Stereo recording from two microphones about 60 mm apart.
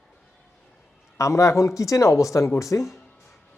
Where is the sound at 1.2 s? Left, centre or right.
Left.